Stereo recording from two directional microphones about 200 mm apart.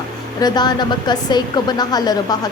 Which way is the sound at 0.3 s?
20° left (ahead or behind).